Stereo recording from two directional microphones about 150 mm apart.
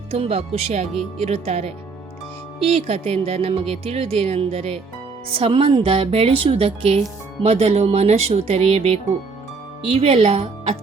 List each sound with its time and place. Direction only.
0.1 s speech: 40° right (ahead or behind)